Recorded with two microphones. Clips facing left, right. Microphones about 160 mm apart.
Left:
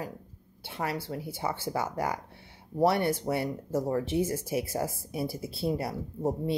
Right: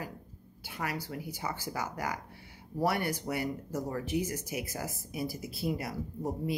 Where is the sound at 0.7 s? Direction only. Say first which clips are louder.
Left 4 dB; 25° left (ahead or behind).